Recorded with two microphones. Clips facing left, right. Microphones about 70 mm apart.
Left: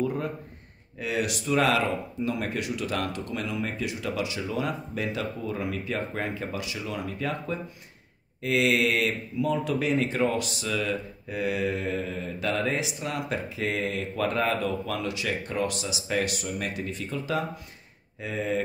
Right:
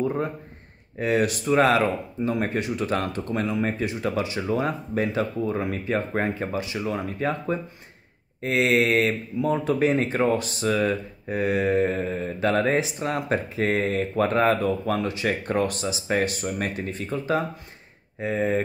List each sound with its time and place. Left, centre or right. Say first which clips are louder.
0.0 s a man's voice: right 3 dB; right
0.9 s speech: right 6 dB; right